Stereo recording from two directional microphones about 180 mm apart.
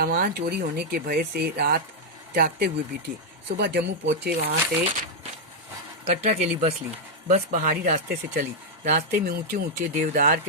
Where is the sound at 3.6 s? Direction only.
70° right (ahead or behind).